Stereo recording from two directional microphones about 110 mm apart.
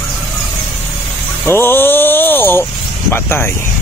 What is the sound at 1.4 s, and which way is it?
Speech, 20° left (ahead or behind).